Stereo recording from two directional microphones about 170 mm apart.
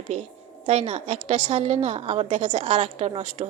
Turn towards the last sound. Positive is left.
turn(degrees=-40)  # may be behind; listen again after turning